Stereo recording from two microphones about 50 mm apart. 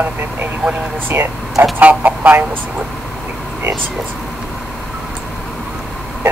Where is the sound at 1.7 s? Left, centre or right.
Right.